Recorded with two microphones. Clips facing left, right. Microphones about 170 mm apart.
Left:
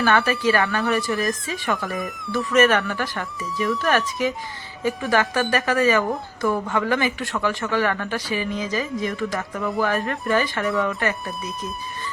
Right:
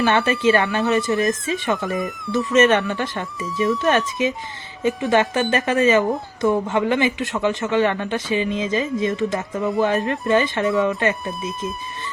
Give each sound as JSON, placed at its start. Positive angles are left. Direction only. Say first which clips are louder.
{"t": 0.0, "sound": "speech", "louder": "right 2 dB", "side_deg": -25}
{"t": 1.9, "sound": "speech", "louder": "right 4 dB", "side_deg": 0}
{"t": 2.5, "sound": "speech", "louder": "right 2 dB", "side_deg": -25}